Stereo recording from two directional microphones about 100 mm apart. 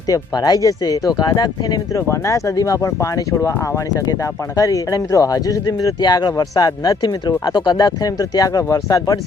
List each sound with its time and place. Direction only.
0.1 s speech: 40° left (ahead or behind)
2.0 s speech: 30° left (ahead or behind)
4.5 s speech: 35° left (ahead or behind)